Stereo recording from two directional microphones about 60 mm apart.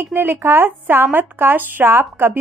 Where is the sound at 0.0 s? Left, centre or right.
Right.